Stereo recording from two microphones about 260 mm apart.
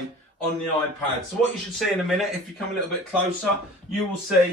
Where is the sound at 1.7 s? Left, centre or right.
Centre.